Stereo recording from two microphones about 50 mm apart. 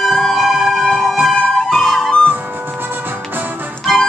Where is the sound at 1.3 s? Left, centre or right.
Centre.